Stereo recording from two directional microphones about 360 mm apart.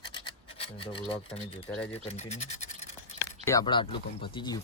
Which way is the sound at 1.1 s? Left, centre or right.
Centre.